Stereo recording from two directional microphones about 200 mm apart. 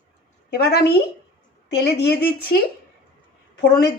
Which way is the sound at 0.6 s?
50° left (ahead or behind).